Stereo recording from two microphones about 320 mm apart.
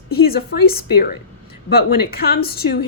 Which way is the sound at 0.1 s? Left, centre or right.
Left.